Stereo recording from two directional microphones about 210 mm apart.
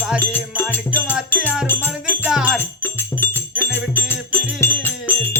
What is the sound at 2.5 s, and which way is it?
Music, 10° left (ahead or behind).